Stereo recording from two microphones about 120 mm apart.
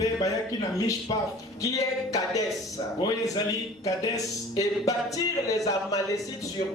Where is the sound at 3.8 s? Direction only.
30° left (ahead or behind).